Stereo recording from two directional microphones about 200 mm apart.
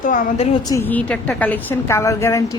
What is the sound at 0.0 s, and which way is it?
Speech, 40° left (ahead or behind).